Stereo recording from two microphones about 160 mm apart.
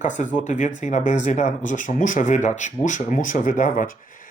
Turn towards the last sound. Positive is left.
turn(degrees=60)  # may be behind; listen again after turning